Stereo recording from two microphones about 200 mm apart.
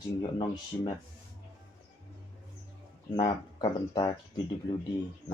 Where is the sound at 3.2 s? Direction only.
25° left (ahead or behind).